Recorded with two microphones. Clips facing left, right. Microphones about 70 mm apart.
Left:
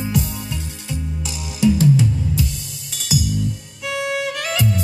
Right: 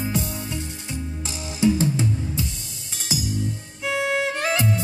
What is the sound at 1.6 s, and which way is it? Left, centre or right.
Music, right.